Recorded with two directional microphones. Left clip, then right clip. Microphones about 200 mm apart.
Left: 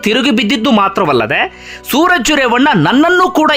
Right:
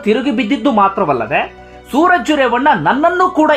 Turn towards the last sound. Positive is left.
turn(degrees=35)  # may be behind; listen again after turning